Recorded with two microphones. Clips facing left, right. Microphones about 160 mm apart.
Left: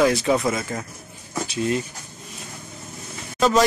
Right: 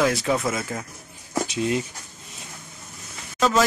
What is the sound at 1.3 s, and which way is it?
Speech, 20° right (ahead or behind).